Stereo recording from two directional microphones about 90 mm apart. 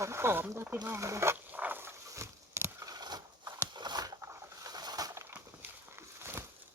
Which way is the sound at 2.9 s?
50° right (ahead or behind).